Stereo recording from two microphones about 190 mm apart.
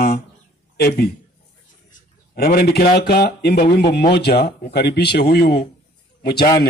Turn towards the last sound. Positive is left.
turn(degrees=55)  # may be behind; listen again after turning